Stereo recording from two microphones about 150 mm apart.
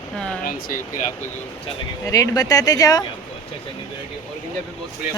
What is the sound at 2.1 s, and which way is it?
Speech, 25° left (ahead or behind).